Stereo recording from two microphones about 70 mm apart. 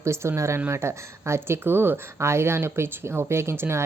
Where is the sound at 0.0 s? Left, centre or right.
Right.